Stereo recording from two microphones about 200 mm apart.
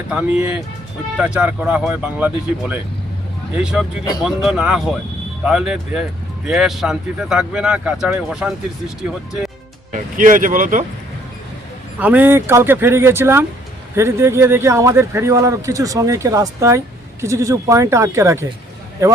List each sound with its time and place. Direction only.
0.1 s speech: 5° right (ahead or behind)
9.9 s speech: 40° right (ahead or behind)
11.9 s speech: 10° right (ahead or behind)